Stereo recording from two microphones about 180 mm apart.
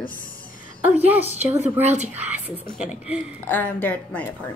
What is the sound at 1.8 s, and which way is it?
Speech, 40° right (ahead or behind).